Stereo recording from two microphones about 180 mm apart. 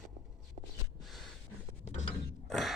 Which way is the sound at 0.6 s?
35° right (ahead or behind).